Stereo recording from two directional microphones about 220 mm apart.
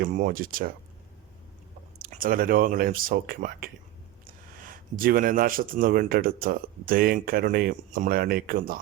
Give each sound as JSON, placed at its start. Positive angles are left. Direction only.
{"t": 0.1, "sound": "speech", "side_deg": -35}
{"t": 2.0, "sound": "speech", "side_deg": -40}